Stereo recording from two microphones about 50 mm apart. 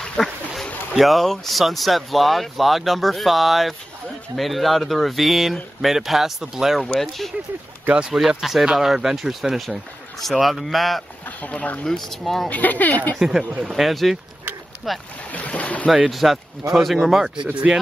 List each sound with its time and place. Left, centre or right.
0.2 s speech: centre
6.8 s speech: centre
7.9 s speech: centre
8.4 s speech: centre
11.5 s speech: left
11.8 s speech: centre
12.4 s speech: left
13.2 s speech: centre
15.3 s speech: left
16.1 s speech: centre